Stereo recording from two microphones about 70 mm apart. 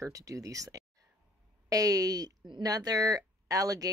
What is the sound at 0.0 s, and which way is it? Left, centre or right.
Speech, right.